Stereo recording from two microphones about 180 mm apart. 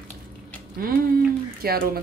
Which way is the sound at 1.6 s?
55° right (ahead or behind).